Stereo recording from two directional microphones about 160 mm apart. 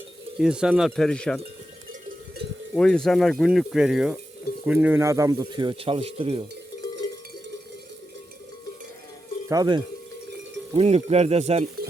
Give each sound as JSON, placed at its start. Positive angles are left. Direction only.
{"t": 0.3, "sound": "speech", "side_deg": -5}
{"t": 1.9, "sound": "cowbell", "side_deg": -60}
{"t": 2.7, "sound": "speech", "side_deg": 5}
{"t": 9.5, "sound": "speech", "side_deg": -25}
{"t": 10.8, "sound": "speech", "side_deg": -40}